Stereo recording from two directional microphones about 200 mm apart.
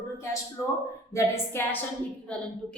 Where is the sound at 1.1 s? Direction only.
10° left (ahead or behind).